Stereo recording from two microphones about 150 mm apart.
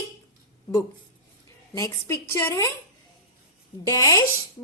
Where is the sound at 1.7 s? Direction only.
20° left (ahead or behind).